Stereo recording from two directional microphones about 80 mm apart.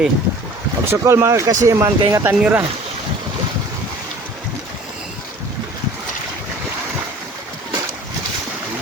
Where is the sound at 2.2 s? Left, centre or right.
Right.